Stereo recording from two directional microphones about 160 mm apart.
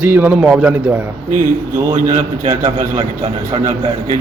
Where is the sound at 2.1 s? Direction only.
50° right (ahead or behind).